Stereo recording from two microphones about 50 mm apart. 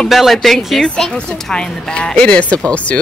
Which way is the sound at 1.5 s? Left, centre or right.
Centre.